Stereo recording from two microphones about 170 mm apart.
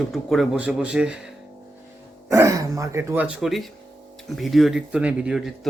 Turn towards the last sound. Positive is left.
turn(degrees=-5)  # may be behind; listen again after turning